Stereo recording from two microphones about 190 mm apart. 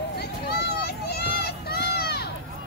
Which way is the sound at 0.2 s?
55° left (ahead or behind).